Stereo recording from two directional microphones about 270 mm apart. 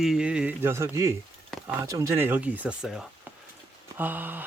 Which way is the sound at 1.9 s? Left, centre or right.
Centre.